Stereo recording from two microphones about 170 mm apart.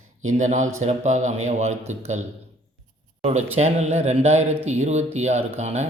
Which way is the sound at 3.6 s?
40° right (ahead or behind).